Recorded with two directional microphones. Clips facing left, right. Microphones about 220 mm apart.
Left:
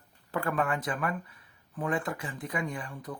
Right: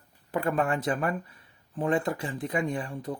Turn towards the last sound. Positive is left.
turn(degrees=-25)  # may be behind; listen again after turning